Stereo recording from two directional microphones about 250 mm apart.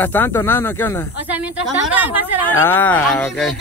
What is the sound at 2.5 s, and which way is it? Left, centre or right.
Speech, centre.